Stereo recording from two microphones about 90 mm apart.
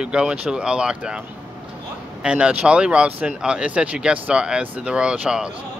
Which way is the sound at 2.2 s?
10° right (ahead or behind).